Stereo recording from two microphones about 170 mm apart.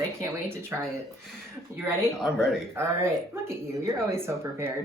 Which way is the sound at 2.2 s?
Centre (ahead or behind).